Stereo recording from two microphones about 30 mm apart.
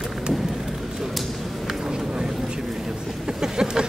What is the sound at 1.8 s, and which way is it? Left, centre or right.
Vehicle, right.